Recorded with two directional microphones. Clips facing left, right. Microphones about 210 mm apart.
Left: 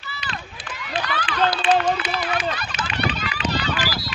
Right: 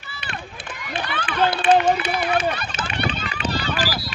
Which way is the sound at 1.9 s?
30° right (ahead or behind).